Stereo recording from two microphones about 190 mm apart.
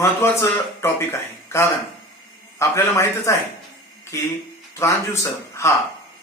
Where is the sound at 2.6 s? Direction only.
15° left (ahead or behind).